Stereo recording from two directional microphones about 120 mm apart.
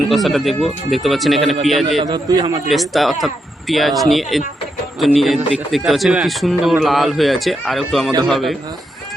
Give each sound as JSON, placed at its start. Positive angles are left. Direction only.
{"t": 0.1, "sound": "a man's voice", "side_deg": 0}
{"t": 2.0, "sound": "a man's voice", "side_deg": -35}
{"t": 2.6, "sound": "a man's voice", "side_deg": 0}